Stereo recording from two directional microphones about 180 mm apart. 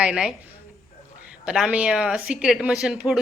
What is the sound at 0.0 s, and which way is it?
Speech, 5° right (ahead or behind).